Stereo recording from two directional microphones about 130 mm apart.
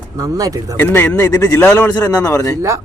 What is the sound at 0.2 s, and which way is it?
Speech, 25° right (ahead or behind).